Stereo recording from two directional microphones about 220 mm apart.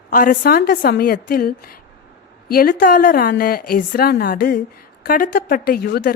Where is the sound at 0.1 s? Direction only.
40° left (ahead or behind).